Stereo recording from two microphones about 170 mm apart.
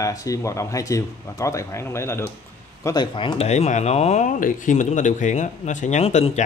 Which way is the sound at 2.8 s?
25° left (ahead or behind).